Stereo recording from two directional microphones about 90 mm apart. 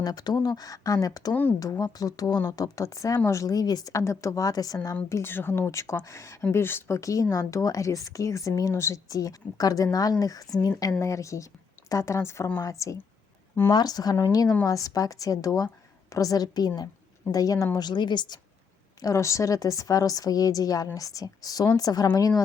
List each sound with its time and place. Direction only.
0.0 s speech: 45° left (ahead or behind)
1.3 s speech: 20° left (ahead or behind)
1.5 s speech: 40° left (ahead or behind)
5.0 s speech: 30° left (ahead or behind)
13.7 s speech: 50° left (ahead or behind)
17.7 s a woman's voice: 55° left (ahead or behind)
19.0 s speech: 35° left (ahead or behind)